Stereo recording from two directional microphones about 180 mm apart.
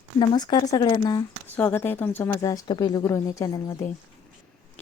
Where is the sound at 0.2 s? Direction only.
25° left (ahead or behind).